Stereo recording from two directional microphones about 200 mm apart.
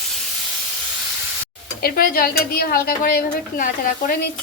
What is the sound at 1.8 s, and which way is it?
A woman's voice, 50° left (ahead or behind).